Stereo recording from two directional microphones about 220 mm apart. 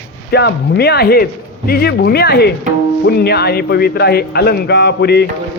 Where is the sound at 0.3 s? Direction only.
50° left (ahead or behind).